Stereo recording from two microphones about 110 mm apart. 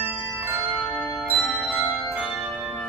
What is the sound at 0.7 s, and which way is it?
Bell, 10° left (ahead or behind).